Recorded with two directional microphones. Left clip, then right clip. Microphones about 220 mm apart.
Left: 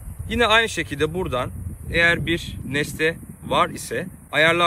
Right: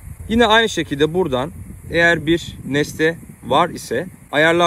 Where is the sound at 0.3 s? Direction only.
30° right (ahead or behind).